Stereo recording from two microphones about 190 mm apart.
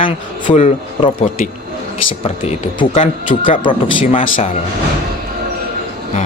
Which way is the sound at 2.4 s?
35° left (ahead or behind).